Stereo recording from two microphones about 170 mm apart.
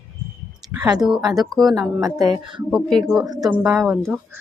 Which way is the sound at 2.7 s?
Centre (ahead or behind).